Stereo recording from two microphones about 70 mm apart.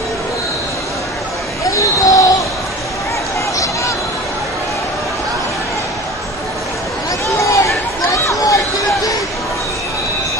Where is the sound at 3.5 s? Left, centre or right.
Left.